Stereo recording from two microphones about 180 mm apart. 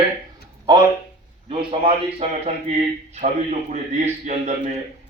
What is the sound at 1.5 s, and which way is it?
A man's voice, 30° right (ahead or behind).